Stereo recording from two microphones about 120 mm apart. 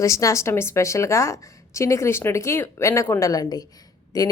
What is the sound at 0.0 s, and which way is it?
A woman's voice, 25° left (ahead or behind).